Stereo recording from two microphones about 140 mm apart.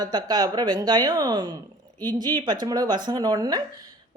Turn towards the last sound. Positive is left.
turn(degrees=-30)  # may be behind; listen again after turning